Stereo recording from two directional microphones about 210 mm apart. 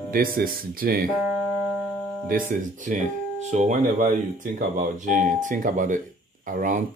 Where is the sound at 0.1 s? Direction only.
45° right (ahead or behind).